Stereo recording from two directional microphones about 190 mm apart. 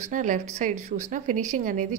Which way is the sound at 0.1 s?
40° right (ahead or behind).